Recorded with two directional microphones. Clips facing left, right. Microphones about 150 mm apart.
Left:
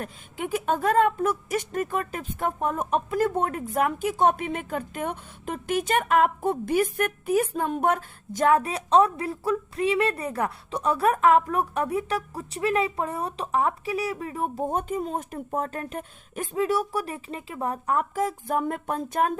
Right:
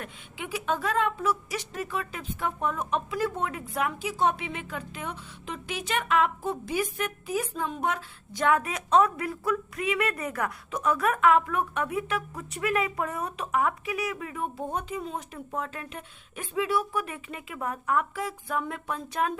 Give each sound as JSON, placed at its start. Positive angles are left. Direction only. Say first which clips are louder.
{"t": 0.0, "sound": "a woman's voice", "louder": "left 6 dB", "side_deg": 45}